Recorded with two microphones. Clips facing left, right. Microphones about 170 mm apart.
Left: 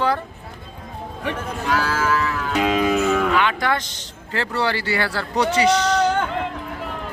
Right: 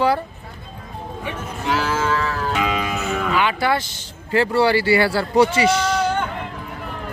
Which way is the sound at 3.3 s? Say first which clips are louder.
Right 1 dB; 5° right (ahead or behind).